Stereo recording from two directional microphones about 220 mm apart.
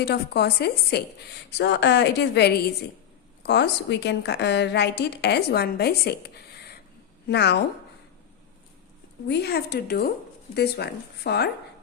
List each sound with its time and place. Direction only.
0.0 s speech: 50° left (ahead or behind)
9.2 s speech: 50° left (ahead or behind)